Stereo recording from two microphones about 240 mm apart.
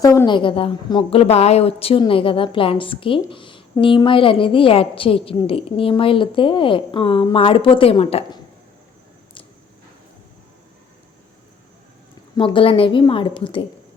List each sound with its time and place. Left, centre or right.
0.0 s a woman's voice: centre
12.4 s a woman's voice: left